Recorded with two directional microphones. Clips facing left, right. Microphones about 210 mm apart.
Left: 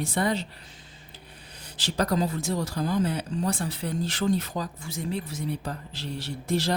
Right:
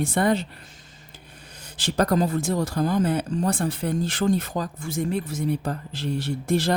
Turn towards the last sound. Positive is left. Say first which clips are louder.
# right 4 dB
turn(degrees=-55)  # may be behind; listen again after turning